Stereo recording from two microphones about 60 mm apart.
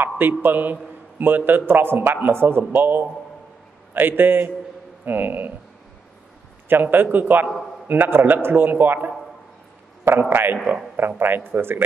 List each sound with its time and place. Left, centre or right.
0.0 s a man's voice: right
6.7 s a man's voice: right
10.3 s a man's voice: right